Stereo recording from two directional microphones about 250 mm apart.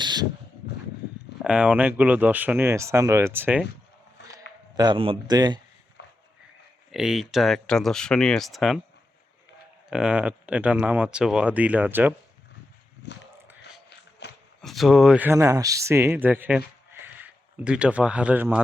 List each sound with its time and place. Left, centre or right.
0.0 s a sound: centre
1.4 s speech: centre
4.7 s speech: centre
6.0 s a sound: left
6.9 s speech: centre
9.9 s speech: centre
13.0 s speech: left
14.2 s a sound: left
14.6 s a man's voice: centre